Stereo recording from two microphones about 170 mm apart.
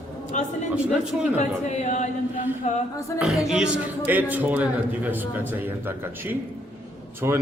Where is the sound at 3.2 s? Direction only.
Centre (ahead or behind).